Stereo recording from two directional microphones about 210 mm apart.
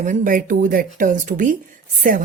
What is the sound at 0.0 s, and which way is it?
A woman's voice, 40° right (ahead or behind).